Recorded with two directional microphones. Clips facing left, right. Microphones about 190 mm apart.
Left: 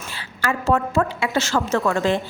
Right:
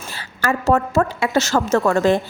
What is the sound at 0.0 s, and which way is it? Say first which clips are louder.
A woman's voice: right 3 dB; 45° right (ahead or behind).